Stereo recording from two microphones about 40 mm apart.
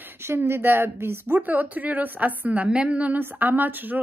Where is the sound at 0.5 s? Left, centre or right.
Right.